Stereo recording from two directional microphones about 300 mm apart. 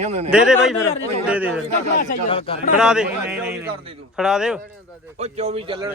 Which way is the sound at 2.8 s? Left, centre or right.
Centre.